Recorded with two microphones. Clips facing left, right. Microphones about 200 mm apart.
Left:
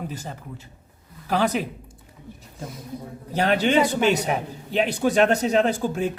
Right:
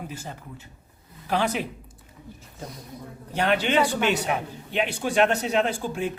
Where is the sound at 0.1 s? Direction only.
40° left (ahead or behind).